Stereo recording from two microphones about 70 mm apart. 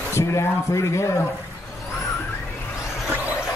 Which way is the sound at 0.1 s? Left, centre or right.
Left.